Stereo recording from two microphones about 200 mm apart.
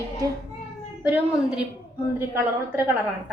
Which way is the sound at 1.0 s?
5° right (ahead or behind).